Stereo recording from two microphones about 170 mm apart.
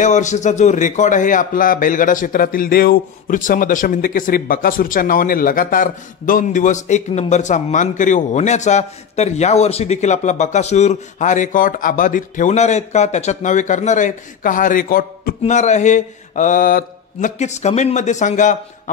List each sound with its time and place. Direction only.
0.0 s a man's voice: 45° left (ahead or behind)